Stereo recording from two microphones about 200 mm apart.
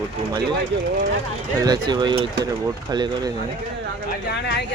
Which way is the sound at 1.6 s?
20° right (ahead or behind).